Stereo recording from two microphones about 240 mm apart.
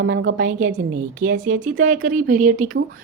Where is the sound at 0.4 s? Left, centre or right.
Right.